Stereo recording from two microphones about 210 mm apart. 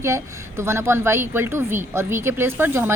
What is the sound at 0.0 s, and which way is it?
A woman's voice, 15° right (ahead or behind).